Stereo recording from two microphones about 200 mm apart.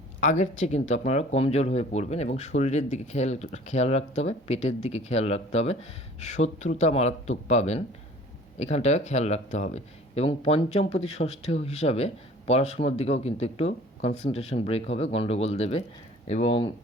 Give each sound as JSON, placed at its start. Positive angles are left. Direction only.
{"t": 0.2, "sound": "speech", "side_deg": 35}